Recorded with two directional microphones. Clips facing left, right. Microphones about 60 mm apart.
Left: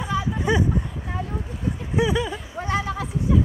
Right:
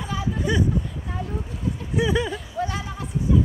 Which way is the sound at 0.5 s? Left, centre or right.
Left.